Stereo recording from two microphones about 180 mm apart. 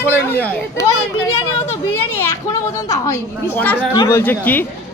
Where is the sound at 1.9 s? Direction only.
15° left (ahead or behind).